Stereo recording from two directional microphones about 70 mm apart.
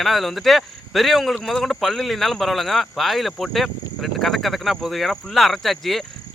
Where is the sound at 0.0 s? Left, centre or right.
Centre.